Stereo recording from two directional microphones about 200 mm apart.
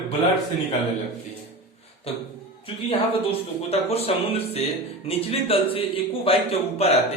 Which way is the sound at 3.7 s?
30° left (ahead or behind).